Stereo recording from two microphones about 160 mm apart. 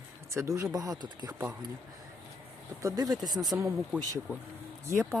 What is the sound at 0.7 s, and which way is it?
Speech, 25° right (ahead or behind).